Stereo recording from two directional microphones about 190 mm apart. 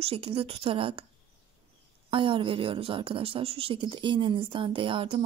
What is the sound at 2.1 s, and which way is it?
A woman's voice, 25° right (ahead or behind).